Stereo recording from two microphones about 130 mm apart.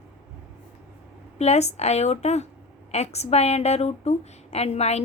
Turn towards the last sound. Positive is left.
turn(degrees=55)  # may be behind; listen again after turning